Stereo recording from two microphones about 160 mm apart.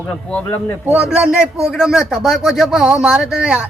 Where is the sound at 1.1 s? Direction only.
5° right (ahead or behind).